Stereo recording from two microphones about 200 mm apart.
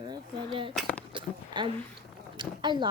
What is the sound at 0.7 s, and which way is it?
Speech, 5° left (ahead or behind).